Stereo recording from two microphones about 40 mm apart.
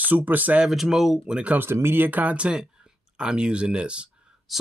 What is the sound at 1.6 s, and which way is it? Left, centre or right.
Speech, right.